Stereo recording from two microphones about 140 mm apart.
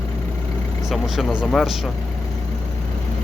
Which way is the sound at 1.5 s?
Centre (ahead or behind).